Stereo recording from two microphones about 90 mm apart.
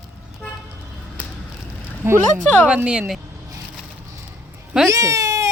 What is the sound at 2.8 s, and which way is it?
Speech, 10° right (ahead or behind).